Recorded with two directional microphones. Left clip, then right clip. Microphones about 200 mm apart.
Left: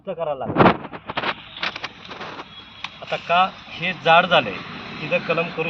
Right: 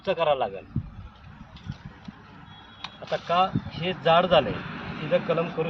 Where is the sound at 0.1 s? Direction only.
20° right (ahead or behind).